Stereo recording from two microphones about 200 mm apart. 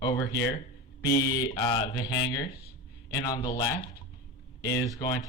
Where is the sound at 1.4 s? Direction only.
20° left (ahead or behind).